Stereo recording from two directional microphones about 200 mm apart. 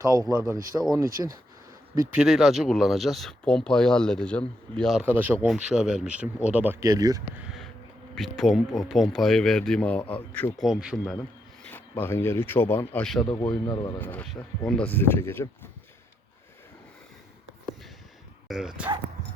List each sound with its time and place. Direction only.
0.0 s speech: 15° right (ahead or behind)
2.1 s speech: centre (ahead or behind); by 7.2 s 20° right (ahead or behind)
8.1 s speech: centre (ahead or behind)
18.4 s speech: centre (ahead or behind)